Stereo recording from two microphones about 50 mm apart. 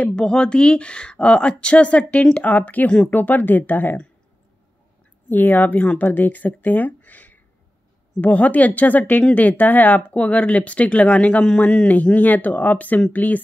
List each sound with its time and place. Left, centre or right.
0.0 s speech: centre
2.4 s speech: left
5.3 s speech: left